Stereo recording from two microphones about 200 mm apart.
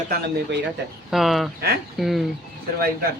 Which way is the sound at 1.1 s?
Centre (ahead or behind).